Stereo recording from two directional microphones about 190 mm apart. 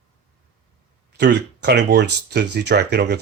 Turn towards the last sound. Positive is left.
turn(degrees=-60)  # may be behind; listen again after turning